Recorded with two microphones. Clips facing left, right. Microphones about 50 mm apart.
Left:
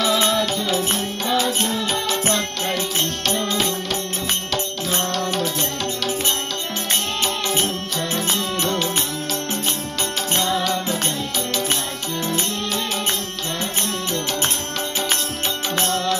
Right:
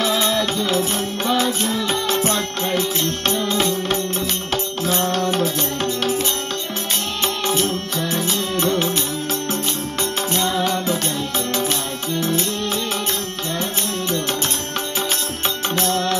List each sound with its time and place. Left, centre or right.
0.7 s music: right
5.0 s music: right
10.4 s music: right
15.9 s music: right